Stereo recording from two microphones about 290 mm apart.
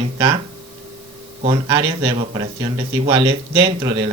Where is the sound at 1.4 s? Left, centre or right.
Centre.